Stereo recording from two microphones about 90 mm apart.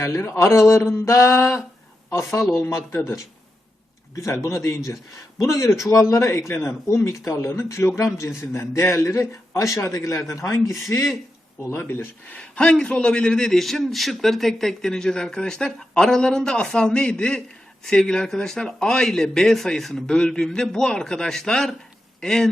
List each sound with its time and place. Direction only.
0.0 s a man's voice: 30° left (ahead or behind)
4.1 s a man's voice: 35° left (ahead or behind)
11.7 s speech: 25° left (ahead or behind)
12.4 s a man's voice: 10° left (ahead or behind)